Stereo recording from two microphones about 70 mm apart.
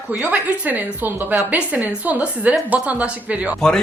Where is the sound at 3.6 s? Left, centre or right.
Centre.